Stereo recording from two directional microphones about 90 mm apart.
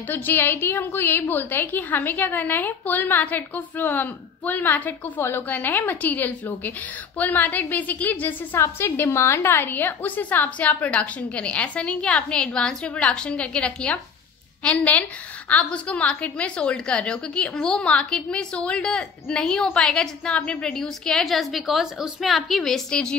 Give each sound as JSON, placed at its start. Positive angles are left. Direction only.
{"t": 0.1, "sound": "a woman's voice", "side_deg": 25}